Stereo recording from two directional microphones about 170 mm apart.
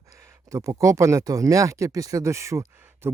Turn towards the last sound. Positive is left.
turn(degrees=-15)  # may be behind; listen again after turning